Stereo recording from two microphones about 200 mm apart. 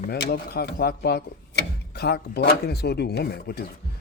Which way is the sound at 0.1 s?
50° left (ahead or behind).